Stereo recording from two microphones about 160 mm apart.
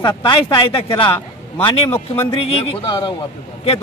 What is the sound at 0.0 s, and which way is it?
A man's voice, 30° left (ahead or behind).